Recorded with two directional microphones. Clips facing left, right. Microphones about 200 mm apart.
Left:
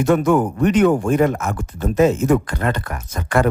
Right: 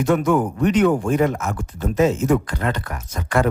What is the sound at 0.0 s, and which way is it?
Speech, 50° left (ahead or behind).